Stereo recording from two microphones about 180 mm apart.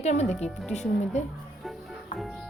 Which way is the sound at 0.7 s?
40° left (ahead or behind).